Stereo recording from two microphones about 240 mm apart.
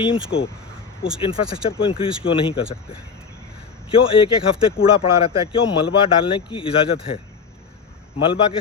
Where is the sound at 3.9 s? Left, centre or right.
Left.